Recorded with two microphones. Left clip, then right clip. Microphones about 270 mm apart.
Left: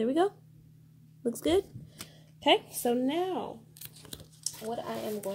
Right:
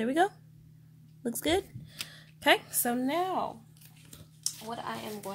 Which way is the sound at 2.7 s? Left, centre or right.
Right.